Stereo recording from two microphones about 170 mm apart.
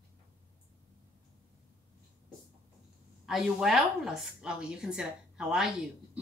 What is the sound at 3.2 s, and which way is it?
A woman's voice, centre (ahead or behind).